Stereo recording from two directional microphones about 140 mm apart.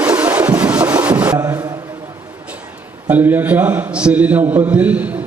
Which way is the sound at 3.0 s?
10° right (ahead or behind).